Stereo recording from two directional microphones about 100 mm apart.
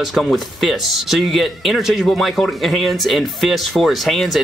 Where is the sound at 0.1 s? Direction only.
Centre (ahead or behind).